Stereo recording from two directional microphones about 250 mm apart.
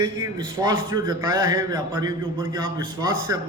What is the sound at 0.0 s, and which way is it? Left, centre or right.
A man's voice, centre.